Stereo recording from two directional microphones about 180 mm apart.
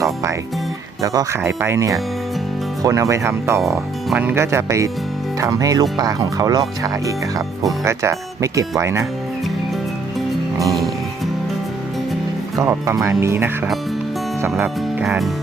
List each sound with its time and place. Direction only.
0.0 s music: 15° right (ahead or behind)
1.0 s speech: 20° right (ahead or behind)
10.6 s speech: 20° right (ahead or behind)
12.5 s speech: 15° right (ahead or behind)
14.6 s speech: 10° right (ahead or behind)